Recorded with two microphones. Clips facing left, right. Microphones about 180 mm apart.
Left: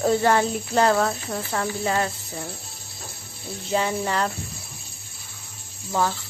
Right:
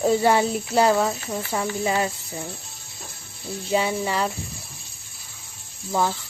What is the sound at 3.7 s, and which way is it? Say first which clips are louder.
Speech: right 1 dB; 10° right (ahead or behind).